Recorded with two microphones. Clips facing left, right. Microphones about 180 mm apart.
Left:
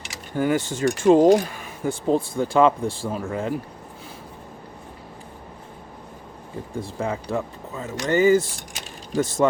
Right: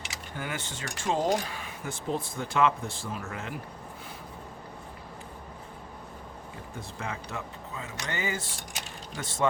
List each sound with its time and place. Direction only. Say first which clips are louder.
0.3 s speech: left 15 dB; 40° left (ahead or behind)
1.5 s a sound: left 9 dB; 45° left (ahead or behind)
1.9 s speech: left 11 dB; 30° left (ahead or behind)
6.7 s speech: left 10 dB; 30° left (ahead or behind)